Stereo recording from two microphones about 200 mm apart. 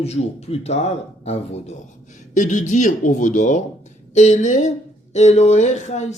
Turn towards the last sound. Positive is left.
turn(degrees=35)  # may be behind; listen again after turning